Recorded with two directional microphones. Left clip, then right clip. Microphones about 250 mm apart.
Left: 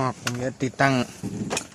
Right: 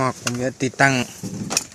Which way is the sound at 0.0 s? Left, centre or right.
Centre.